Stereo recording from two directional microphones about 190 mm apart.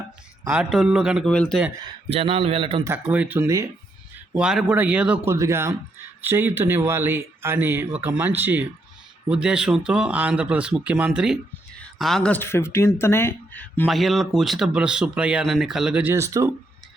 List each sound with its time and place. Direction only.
0.5 s speech: 5° right (ahead or behind)
2.0 s a man's voice: 30° right (ahead or behind)
2.8 s speech: 10° right (ahead or behind)